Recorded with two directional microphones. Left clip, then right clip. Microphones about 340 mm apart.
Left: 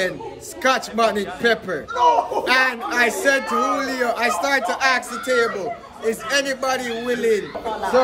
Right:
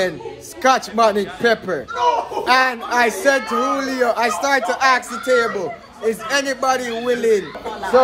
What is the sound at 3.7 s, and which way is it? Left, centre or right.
Speech, centre.